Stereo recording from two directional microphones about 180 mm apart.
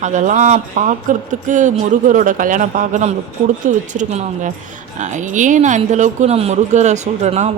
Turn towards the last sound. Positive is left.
turn(degrees=-40)  # may be behind; listen again after turning